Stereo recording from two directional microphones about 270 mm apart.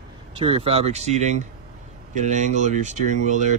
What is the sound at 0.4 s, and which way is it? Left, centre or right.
Speech, right.